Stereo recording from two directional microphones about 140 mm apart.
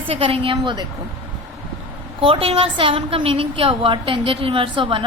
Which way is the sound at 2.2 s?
40° right (ahead or behind).